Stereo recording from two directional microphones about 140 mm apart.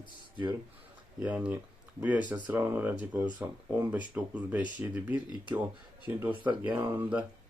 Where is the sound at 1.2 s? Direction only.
10° right (ahead or behind).